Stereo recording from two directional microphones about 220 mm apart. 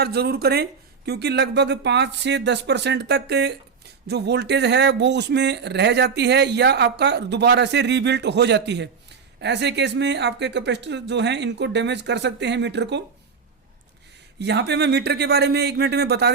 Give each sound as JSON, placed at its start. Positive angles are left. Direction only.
{"t": 0.0, "sound": "speech", "side_deg": -45}
{"t": 14.3, "sound": "speech", "side_deg": -50}